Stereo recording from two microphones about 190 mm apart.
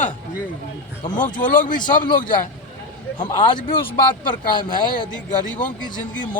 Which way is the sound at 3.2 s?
25° left (ahead or behind).